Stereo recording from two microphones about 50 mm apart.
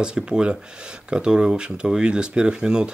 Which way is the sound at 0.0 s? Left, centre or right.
Centre.